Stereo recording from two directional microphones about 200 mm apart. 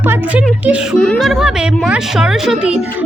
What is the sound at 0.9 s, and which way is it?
Speech, 5° left (ahead or behind).